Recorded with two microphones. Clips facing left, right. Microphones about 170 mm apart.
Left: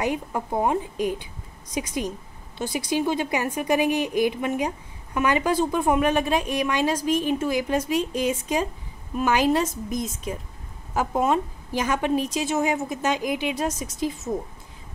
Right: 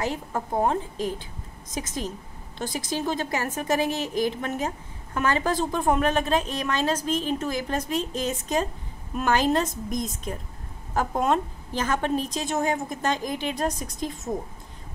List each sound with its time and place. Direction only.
0.0 s a woman's voice: 15° left (ahead or behind)